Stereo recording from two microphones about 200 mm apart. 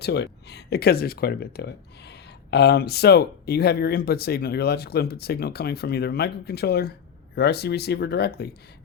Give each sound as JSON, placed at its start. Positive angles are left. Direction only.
{"t": 0.0, "sound": "speech", "side_deg": 55}